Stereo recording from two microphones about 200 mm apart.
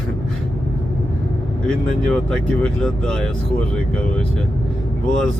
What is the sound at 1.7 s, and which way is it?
Speech, 5° left (ahead or behind).